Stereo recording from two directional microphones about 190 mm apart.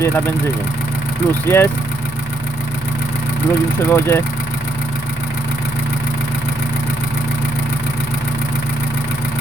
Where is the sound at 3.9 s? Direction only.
15° left (ahead or behind).